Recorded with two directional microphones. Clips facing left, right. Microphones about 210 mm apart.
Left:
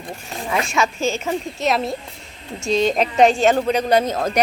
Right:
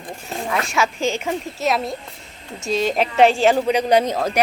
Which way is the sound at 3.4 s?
10° right (ahead or behind).